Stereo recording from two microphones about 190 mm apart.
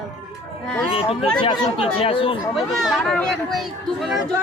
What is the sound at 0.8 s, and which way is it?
Speech, 30° left (ahead or behind).